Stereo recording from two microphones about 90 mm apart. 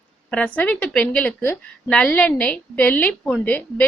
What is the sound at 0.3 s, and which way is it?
A woman's voice, 15° left (ahead or behind).